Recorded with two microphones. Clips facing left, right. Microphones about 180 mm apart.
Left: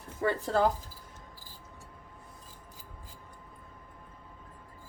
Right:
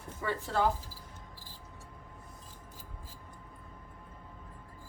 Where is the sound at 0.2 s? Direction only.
40° left (ahead or behind).